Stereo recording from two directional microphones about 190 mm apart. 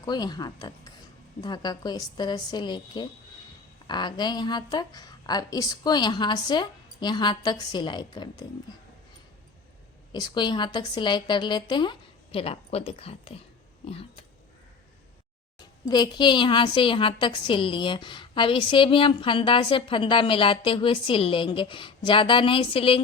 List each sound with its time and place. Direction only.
0.0 s a woman's voice: 20° left (ahead or behind)
10.1 s a woman's voice: 25° left (ahead or behind)
15.5 s a woman's voice: 20° left (ahead or behind)